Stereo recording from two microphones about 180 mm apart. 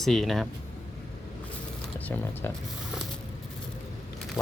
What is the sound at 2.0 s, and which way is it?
Speech, 10° left (ahead or behind).